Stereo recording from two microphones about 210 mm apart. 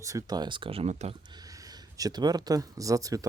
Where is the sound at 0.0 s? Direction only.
15° right (ahead or behind); by 1.1 s 30° right (ahead or behind).